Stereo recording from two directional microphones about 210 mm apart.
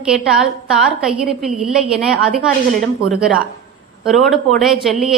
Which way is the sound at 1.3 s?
5° right (ahead or behind).